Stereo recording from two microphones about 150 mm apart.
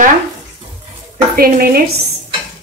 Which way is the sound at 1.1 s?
75° right (ahead or behind).